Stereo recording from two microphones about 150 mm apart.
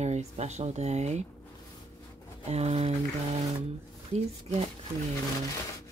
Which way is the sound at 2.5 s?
45° right (ahead or behind).